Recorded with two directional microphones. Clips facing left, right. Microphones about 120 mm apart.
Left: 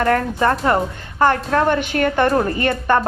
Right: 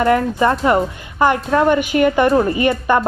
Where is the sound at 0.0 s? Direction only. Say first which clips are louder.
Right 2 dB; 10° right (ahead or behind).